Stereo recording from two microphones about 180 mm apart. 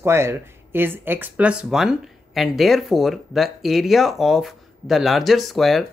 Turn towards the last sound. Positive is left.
turn(degrees=0)  # may be behind; listen again after turning